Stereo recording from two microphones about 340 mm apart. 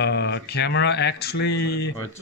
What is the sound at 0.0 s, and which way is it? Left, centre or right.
Speech, left.